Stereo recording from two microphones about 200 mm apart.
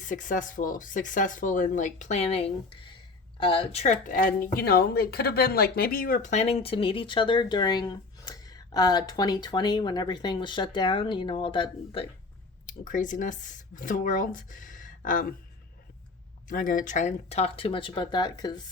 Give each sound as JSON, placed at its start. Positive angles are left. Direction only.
{"t": 0.0, "sound": "speech", "side_deg": 40}
{"t": 4.5, "sound": "speech", "side_deg": 50}
{"t": 12.6, "sound": "speech", "side_deg": 40}
{"t": 16.5, "sound": "speech", "side_deg": 45}